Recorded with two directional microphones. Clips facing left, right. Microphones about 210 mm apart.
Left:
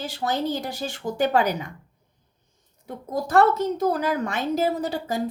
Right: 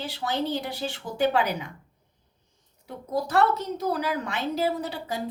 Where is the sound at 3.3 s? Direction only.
50° left (ahead or behind).